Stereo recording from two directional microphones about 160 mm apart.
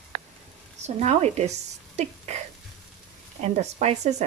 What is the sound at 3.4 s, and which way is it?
Speech, 45° right (ahead or behind).